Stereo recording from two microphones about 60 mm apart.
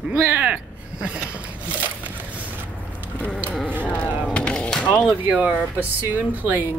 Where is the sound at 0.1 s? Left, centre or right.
Right.